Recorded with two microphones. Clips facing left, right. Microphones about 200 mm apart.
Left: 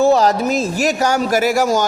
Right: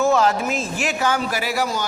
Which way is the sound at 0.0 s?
35° left (ahead or behind).